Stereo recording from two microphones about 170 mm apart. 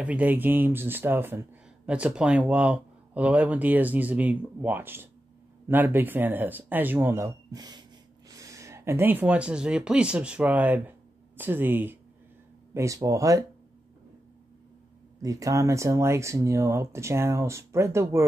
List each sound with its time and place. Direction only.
0.0 s speech: 10° right (ahead or behind)
15.2 s speech: 20° right (ahead or behind)